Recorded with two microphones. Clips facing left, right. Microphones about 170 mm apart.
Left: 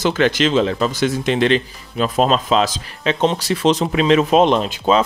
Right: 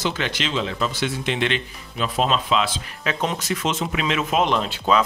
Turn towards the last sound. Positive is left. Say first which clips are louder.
# left 5 dB
turn(degrees=20)  # may be behind; listen again after turning